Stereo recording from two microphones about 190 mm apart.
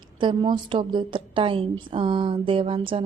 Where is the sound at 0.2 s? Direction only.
25° right (ahead or behind).